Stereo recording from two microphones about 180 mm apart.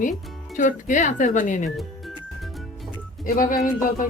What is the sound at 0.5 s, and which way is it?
Speech, 45° left (ahead or behind).